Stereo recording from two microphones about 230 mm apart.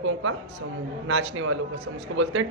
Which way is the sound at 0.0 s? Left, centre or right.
Right.